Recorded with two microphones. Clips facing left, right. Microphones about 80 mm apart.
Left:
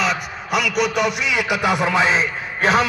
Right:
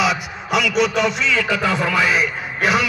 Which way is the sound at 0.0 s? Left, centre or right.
Centre.